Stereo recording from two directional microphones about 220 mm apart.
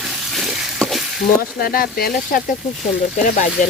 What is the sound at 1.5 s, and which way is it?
Speech, 40° left (ahead or behind).